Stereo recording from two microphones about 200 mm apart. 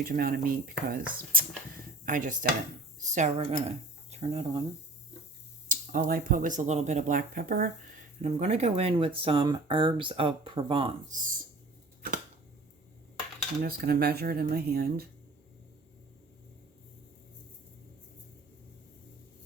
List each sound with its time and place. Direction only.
0.0 s speech: 45° right (ahead or behind); by 4.6 s 30° right (ahead or behind)
5.6 s speech: 45° right (ahead or behind)
8.2 s speech: 35° right (ahead or behind)
11.1 s speech: 40° right (ahead or behind)
13.6 s speech: 50° right (ahead or behind)